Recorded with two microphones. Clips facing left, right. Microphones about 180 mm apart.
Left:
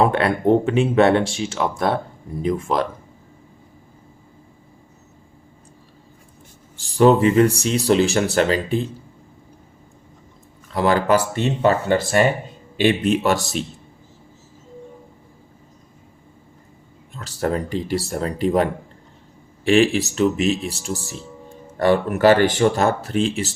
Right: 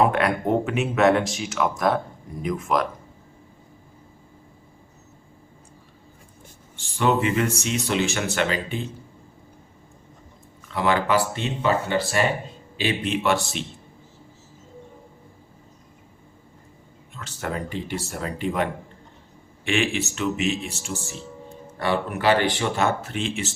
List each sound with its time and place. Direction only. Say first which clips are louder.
0.0 s speech: left 3 dB; 30° left (ahead or behind)
6.7 s speech: left 8 dB; 35° left (ahead or behind)
10.7 s speech: left 4 dB; 40° left (ahead or behind)
17.2 s speech: left 7 dB; 35° left (ahead or behind)